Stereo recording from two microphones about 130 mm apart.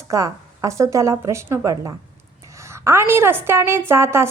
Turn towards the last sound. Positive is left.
turn(degrees=-20)  # may be behind; listen again after turning